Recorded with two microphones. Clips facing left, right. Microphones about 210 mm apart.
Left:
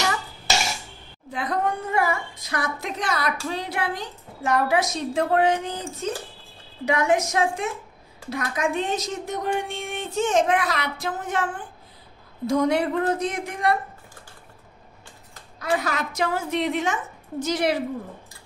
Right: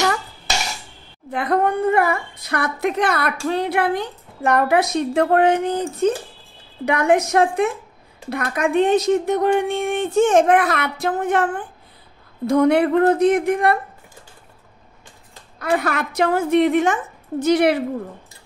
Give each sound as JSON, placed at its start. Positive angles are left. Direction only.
{"t": 1.3, "sound": "speech", "side_deg": -60}
{"t": 15.6, "sound": "speech", "side_deg": -55}